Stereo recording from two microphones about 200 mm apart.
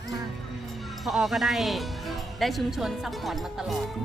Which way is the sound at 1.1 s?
Centre (ahead or behind).